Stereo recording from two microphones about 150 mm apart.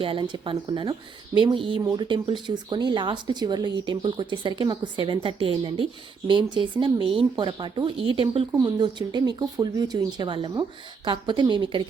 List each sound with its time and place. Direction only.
0.0 s speech: 35° right (ahead or behind)